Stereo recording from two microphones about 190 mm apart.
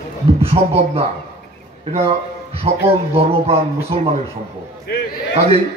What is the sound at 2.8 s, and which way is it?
A man's voice, 30° right (ahead or behind).